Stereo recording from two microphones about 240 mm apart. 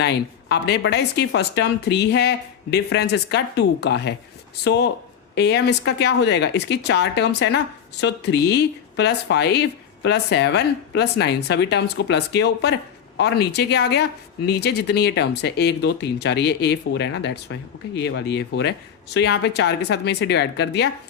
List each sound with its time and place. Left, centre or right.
0.0 s speech: left